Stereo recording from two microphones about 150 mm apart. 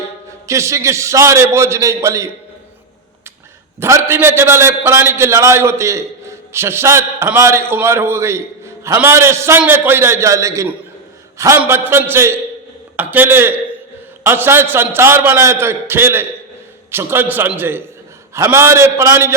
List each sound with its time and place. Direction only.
0.4 s a man's voice: 20° right (ahead or behind)
3.8 s a man's voice: 20° right (ahead or behind)